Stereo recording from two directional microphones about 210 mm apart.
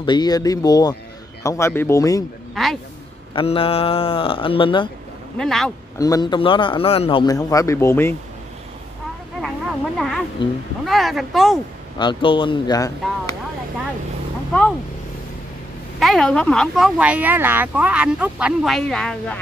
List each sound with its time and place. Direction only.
0.0 s a man's voice: 20° left (ahead or behind)
2.5 s speech: centre (ahead or behind)
3.3 s speech: 25° left (ahead or behind)
5.4 s speech: centre (ahead or behind)
5.9 s a man's voice: 15° left (ahead or behind)
9.4 s a sound: centre (ahead or behind)
10.9 s speech: centre (ahead or behind)
12.0 s speech: 25° left (ahead or behind)
16.0 s speech: centre (ahead or behind)